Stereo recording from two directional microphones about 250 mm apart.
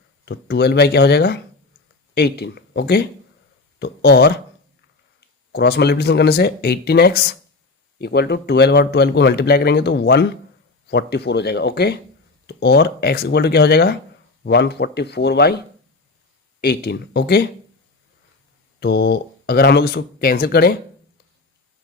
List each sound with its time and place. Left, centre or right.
0.3 s a man's voice: left
5.5 s a man's voice: left
16.6 s a man's voice: left
18.8 s a man's voice: left